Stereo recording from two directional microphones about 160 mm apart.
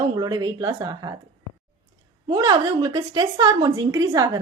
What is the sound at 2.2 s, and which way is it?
A woman's voice, 25° right (ahead or behind).